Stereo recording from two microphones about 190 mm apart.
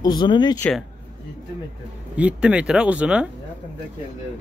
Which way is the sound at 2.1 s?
5° right (ahead or behind).